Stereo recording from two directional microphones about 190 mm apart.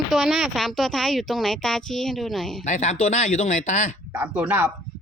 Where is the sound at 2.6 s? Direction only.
40° left (ahead or behind).